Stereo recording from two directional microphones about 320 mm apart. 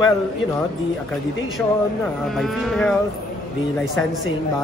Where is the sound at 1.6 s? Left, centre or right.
Centre.